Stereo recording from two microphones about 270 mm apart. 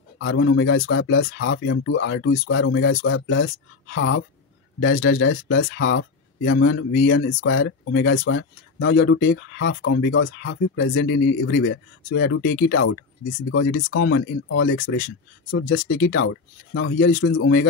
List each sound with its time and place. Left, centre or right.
0.2 s speech: left
16.1 s speech: left